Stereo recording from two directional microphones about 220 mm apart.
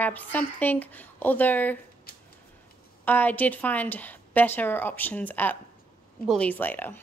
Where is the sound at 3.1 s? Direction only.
10° left (ahead or behind).